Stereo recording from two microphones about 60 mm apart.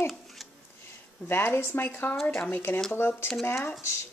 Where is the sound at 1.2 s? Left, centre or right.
Left.